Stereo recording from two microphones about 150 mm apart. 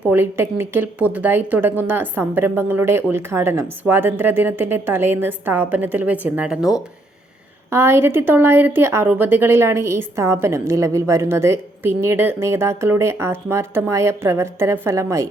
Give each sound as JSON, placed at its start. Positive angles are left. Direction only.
{"t": 0.0, "sound": "speech", "side_deg": -15}
{"t": 7.7, "sound": "speech", "side_deg": -15}